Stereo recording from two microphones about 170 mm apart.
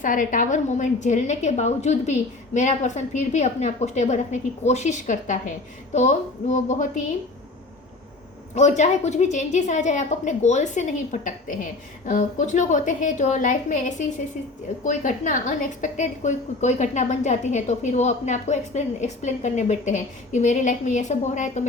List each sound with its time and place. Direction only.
0.0 s a woman's voice: 50° left (ahead or behind)
8.5 s a woman's voice: 45° left (ahead or behind)